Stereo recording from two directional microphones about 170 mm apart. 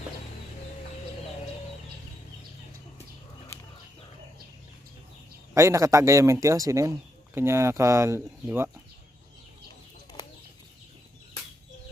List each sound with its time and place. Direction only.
5.5 s speech: 15° right (ahead or behind)